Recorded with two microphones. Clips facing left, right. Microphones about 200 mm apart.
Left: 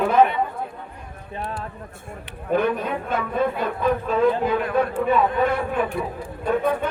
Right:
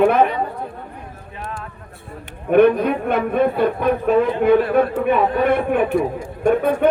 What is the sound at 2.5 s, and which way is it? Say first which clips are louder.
Speech: right 8 dB; 70° right (ahead or behind).